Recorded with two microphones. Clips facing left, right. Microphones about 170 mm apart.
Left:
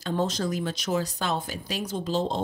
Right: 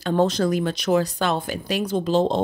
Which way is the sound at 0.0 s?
65° right (ahead or behind).